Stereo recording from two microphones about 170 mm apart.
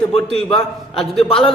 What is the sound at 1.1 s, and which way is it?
Speech, 30° left (ahead or behind).